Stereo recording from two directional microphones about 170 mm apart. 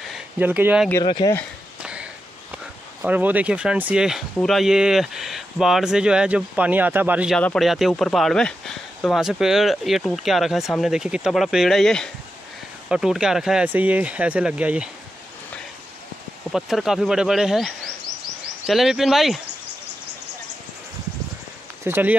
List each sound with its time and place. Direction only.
0.1 s speech: 10° right (ahead or behind)
1.0 s speech: 25° left (ahead or behind)
1.8 s a sound: 5° right (ahead or behind)
2.5 s speech: 10° right (ahead or behind)
7.3 s speech: 5° left (ahead or behind)
16.5 s speech: centre (ahead or behind)
21.8 s speech: 10° right (ahead or behind)